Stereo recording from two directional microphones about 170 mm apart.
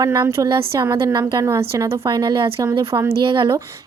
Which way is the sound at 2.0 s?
25° right (ahead or behind).